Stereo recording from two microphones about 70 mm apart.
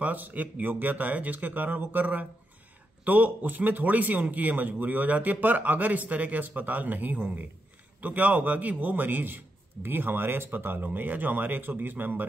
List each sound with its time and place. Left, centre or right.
0.0 s a man's voice: right